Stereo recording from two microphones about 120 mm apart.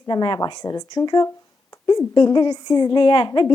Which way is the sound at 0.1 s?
40° left (ahead or behind).